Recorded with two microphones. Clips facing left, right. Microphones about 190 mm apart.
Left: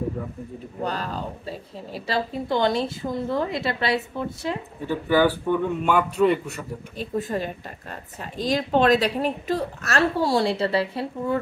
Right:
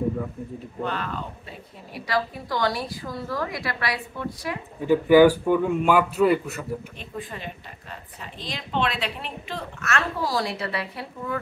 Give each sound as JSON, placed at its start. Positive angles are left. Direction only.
{"t": 0.8, "sound": "a woman's voice", "side_deg": 35}
{"t": 4.8, "sound": "a man's voice", "side_deg": -15}
{"t": 7.0, "sound": "a woman's voice", "side_deg": 40}